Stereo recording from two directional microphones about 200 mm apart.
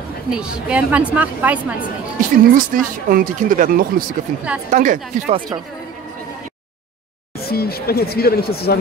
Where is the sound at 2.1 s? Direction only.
40° right (ahead or behind).